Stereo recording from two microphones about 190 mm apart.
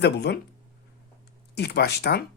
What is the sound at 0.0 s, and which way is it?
Speech, 60° left (ahead or behind).